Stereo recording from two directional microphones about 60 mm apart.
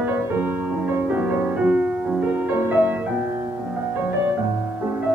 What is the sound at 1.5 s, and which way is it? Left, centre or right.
Music, centre.